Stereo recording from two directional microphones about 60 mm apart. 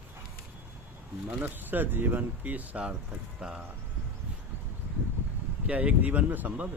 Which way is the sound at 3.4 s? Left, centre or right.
Centre.